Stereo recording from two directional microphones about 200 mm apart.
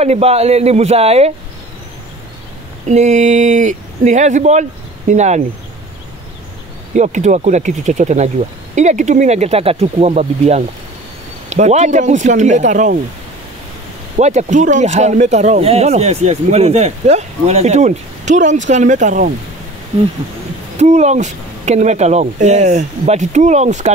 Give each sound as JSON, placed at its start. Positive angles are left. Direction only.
{"t": 0.0, "sound": "speech", "side_deg": -30}
{"t": 2.9, "sound": "speech", "side_deg": -35}
{"t": 7.0, "sound": "speech", "side_deg": -35}
{"t": 14.1, "sound": "speech", "side_deg": -35}
{"t": 20.7, "sound": "speech", "side_deg": -35}